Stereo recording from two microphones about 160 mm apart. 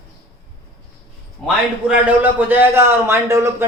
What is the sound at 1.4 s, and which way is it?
A man's voice, 5° right (ahead or behind).